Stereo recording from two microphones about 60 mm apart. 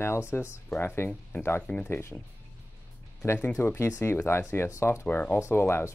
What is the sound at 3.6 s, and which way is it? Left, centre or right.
Speech, left.